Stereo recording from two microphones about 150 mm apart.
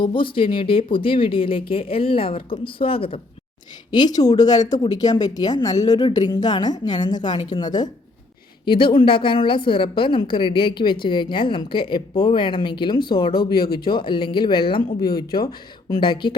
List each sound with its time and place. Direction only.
0.0 s a woman's voice: 35° left (ahead or behind)
3.9 s a woman's voice: 25° left (ahead or behind)
13.3 s speech: 90° left
13.8 s a woman's voice: 30° left (ahead or behind)
15.9 s a woman's voice: 30° left (ahead or behind)